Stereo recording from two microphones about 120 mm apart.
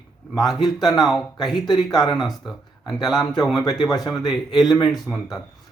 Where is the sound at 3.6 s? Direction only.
35° left (ahead or behind).